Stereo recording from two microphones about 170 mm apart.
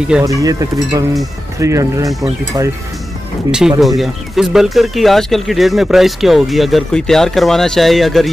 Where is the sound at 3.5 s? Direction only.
5° right (ahead or behind).